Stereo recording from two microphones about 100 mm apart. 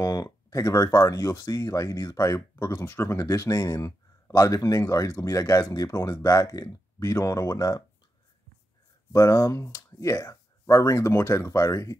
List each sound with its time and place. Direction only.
0.0 s speech: 35° left (ahead or behind)
9.1 s speech: 35° left (ahead or behind)